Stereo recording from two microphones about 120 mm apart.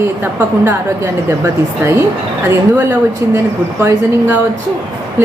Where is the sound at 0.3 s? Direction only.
20° right (ahead or behind).